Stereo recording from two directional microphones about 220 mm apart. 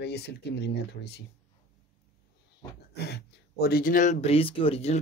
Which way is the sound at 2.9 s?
45° left (ahead or behind).